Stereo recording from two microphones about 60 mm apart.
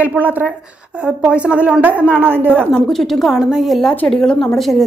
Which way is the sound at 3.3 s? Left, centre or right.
Centre.